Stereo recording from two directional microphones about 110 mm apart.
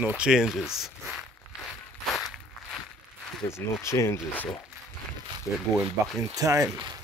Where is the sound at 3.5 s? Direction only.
25° left (ahead or behind).